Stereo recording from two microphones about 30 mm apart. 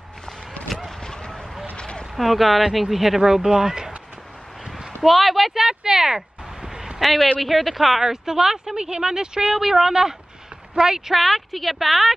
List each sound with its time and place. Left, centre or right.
1.0 s vehicle: left
1.8 s a sound: left
2.1 s a woman's voice: centre
5.0 s a woman's voice: centre
5.6 s a sound: centre
7.0 s a woman's voice: centre; by 9.6 s right
9.6 s speech: centre
11.1 s a woman's voice: centre